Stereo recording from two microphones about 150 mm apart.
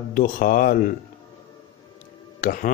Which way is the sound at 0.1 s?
65° left (ahead or behind).